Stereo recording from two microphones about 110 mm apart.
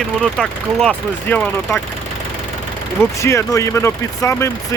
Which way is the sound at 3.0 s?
25° left (ahead or behind).